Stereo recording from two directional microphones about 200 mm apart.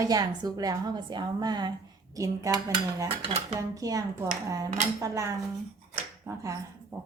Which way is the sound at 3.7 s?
15° right (ahead or behind).